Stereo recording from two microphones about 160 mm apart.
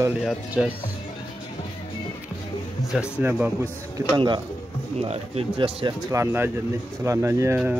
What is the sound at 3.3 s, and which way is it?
Speech, 10° right (ahead or behind).